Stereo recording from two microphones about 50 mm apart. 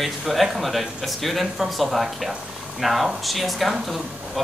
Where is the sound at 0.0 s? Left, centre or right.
Centre.